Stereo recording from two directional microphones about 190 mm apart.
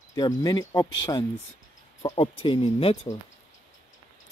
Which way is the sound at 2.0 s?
25° left (ahead or behind).